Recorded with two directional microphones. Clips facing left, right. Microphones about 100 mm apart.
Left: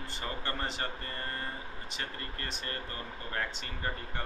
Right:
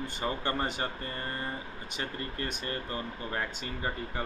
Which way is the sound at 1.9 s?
15° right (ahead or behind).